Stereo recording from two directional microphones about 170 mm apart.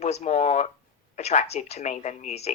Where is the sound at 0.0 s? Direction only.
40° left (ahead or behind).